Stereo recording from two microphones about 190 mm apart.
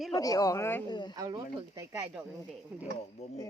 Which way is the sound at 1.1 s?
20° right (ahead or behind).